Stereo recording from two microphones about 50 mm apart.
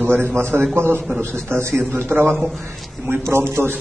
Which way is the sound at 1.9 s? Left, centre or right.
Right.